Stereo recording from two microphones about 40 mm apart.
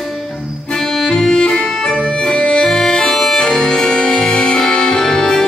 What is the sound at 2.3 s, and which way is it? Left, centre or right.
Accordion, left.